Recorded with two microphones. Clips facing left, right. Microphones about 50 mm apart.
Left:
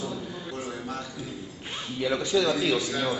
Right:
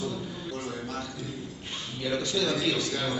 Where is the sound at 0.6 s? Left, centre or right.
Centre.